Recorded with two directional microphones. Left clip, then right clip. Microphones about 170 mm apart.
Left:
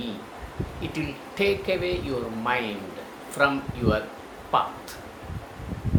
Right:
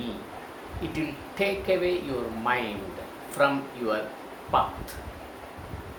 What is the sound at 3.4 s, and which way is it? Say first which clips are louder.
Speech: left 1 dB; 15° left (ahead or behind).